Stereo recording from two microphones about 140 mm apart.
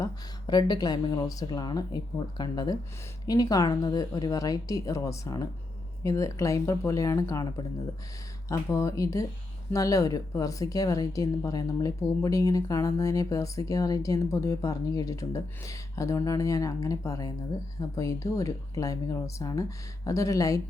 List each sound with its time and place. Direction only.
0.0 s speech: 30° left (ahead or behind)